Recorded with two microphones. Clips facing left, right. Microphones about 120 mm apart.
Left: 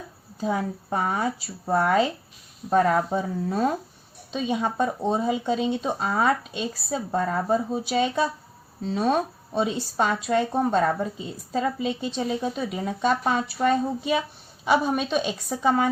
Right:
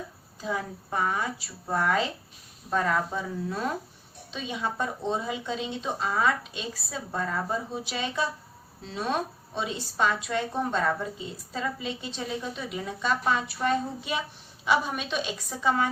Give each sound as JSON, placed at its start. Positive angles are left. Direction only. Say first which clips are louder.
{"t": 0.3, "sound": "speech", "louder": "left 6 dB", "side_deg": 45}